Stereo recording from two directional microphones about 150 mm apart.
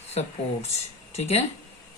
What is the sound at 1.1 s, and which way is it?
Speech, 45° left (ahead or behind).